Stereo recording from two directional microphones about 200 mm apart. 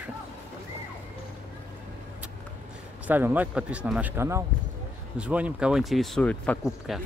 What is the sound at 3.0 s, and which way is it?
Speech, 10° right (ahead or behind).